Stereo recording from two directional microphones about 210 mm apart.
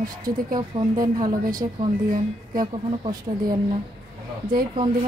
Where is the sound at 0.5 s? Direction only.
20° right (ahead or behind).